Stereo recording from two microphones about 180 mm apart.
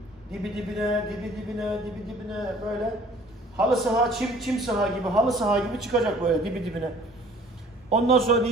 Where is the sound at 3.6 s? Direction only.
Centre (ahead or behind).